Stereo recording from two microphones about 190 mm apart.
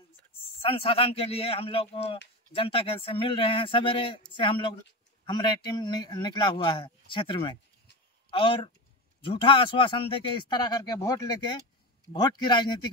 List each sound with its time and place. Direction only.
0.6 s a man's voice: 30° left (ahead or behind)